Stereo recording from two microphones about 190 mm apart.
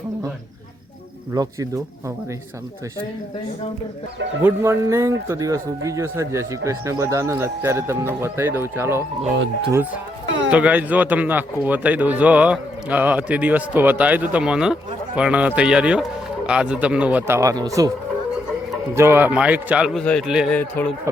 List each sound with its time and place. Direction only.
1.3 s speech: 15° right (ahead or behind)
4.4 s speech: 15° right (ahead or behind)
10.5 s speech: 5° right (ahead or behind)
18.9 s speech: 15° right (ahead or behind)
20.8 s speech: 10° left (ahead or behind)